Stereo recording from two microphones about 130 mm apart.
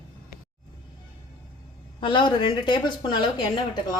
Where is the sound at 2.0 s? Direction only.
40° left (ahead or behind).